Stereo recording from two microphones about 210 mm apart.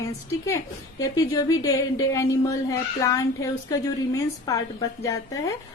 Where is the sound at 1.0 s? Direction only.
15° left (ahead or behind).